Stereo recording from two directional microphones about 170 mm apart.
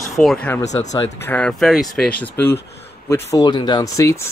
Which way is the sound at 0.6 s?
40° left (ahead or behind).